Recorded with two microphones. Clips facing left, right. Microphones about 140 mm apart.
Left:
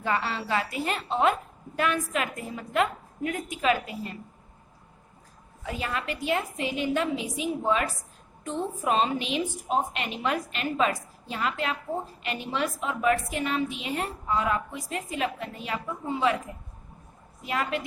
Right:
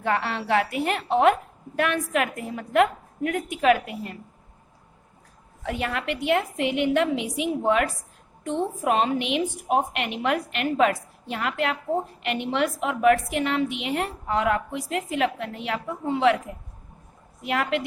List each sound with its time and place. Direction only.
0.0 s a woman's voice: 65° right (ahead or behind)
5.6 s a woman's voice: 70° right (ahead or behind)
17.4 s a woman's voice: 70° right (ahead or behind)